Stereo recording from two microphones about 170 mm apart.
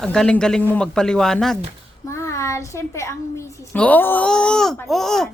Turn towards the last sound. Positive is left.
turn(degrees=0)  # may be behind; listen again after turning